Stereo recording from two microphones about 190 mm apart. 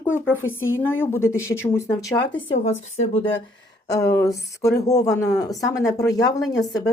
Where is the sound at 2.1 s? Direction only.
80° left.